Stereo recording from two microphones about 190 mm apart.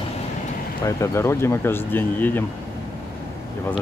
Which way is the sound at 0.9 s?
15° left (ahead or behind).